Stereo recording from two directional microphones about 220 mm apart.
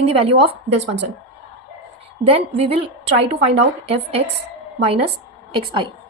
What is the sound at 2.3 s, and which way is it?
A woman's voice, 25° right (ahead or behind).